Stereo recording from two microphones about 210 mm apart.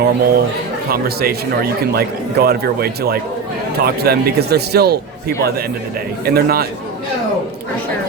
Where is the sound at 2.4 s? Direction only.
50° right (ahead or behind).